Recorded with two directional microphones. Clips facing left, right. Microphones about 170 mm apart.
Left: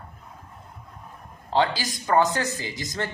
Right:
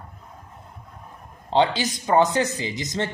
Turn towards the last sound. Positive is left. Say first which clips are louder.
# right 4 dB
turn(degrees=-20)  # may be behind; listen again after turning